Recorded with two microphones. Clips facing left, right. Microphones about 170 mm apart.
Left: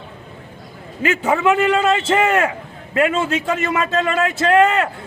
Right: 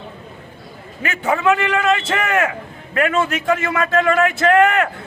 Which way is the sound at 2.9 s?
25° left (ahead or behind).